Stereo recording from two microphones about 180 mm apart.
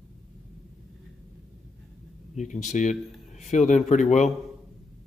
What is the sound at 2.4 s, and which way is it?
A man's voice, 40° left (ahead or behind).